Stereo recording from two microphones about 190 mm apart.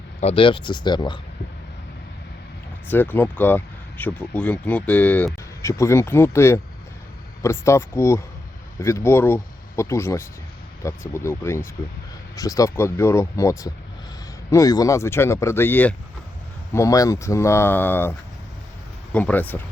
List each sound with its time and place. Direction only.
0.2 s speech: 30° left (ahead or behind)
2.9 s speech: 10° left (ahead or behind)
19.1 s speech: 10° left (ahead or behind)